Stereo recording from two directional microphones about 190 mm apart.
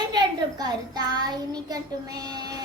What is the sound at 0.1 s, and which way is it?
A child's voice, 20° right (ahead or behind).